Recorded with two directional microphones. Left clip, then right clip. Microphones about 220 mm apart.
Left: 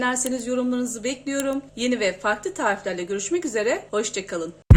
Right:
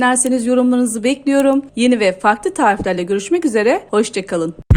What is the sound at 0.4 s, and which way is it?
Speech, 35° right (ahead or behind).